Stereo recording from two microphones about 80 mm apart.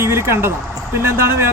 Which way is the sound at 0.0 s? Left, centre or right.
Right.